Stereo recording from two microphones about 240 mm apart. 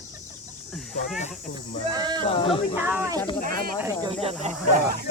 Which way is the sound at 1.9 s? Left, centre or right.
Centre.